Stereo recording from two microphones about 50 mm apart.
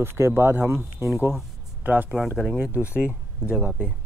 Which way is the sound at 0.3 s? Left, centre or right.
Right.